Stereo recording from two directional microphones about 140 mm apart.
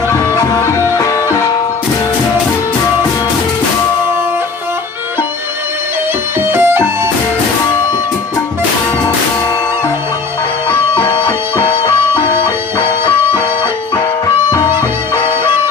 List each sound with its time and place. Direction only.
0.1 s music: 20° left (ahead or behind)
6.4 s music: 15° right (ahead or behind)
10.7 s music: 10° left (ahead or behind)
14.5 s music: 15° right (ahead or behind)